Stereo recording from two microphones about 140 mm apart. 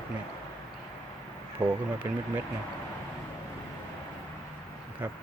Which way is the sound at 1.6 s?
25° right (ahead or behind).